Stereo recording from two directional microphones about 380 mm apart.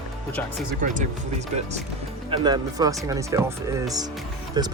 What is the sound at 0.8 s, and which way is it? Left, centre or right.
Speech, centre.